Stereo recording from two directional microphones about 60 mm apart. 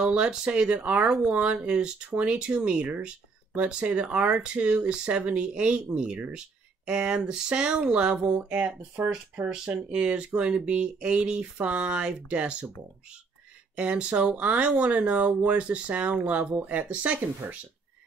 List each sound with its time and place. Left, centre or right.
0.0 s speech: centre
13.7 s speech: centre